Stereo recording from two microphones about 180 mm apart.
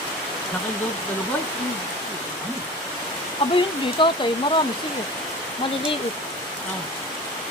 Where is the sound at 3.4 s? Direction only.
30° left (ahead or behind).